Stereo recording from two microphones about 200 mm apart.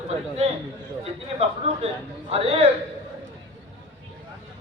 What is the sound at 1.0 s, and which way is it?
A woman's voice, 30° right (ahead or behind).